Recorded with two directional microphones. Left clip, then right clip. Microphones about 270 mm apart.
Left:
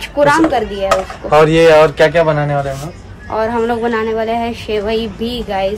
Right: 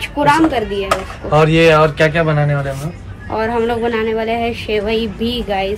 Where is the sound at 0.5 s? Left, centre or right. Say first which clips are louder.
Left 3 dB; centre.